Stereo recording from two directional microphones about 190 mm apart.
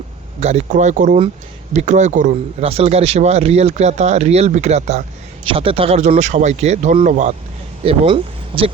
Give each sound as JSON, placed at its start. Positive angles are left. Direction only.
{"t": 0.3, "sound": "speech", "side_deg": -35}
{"t": 7.9, "sound": "speech", "side_deg": -25}